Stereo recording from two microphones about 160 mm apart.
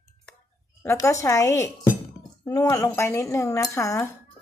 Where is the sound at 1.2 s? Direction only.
15° left (ahead or behind).